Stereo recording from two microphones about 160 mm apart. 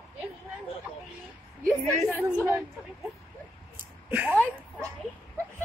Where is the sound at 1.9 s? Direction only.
15° left (ahead or behind).